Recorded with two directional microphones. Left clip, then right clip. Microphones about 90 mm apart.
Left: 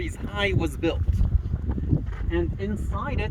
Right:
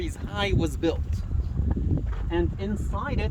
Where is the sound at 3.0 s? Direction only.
40° right (ahead or behind).